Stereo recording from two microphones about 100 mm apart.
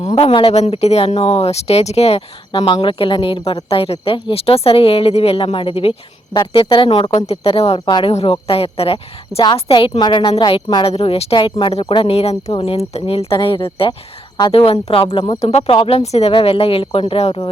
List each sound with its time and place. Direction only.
0.2 s speech: 60° left (ahead or behind); by 2.2 s 90° left
2.5 s a woman's voice: 55° left (ahead or behind)
7.1 s speech: 90° left
7.9 s speech: 50° left (ahead or behind)
8.1 s a woman's voice: 70° left (ahead or behind)
10.8 s speech: 80° left
11.6 s speech: 65° left (ahead or behind)
15.3 s speech: 90° left